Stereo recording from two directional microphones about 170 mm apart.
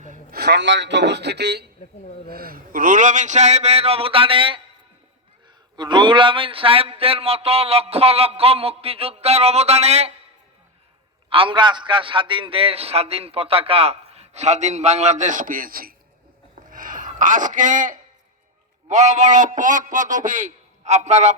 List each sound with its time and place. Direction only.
0.0 s a sound: 50° right (ahead or behind)
0.3 s speech: 80° right
2.3 s a man's voice: 60° right (ahead or behind); by 4.6 s 30° right (ahead or behind)
5.7 s a man's voice: 25° right (ahead or behind)
11.3 s a man's voice: 30° right (ahead or behind)